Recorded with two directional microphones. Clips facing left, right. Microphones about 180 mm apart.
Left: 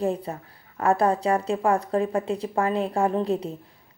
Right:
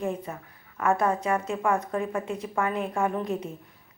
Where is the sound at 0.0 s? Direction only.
35° left (ahead or behind).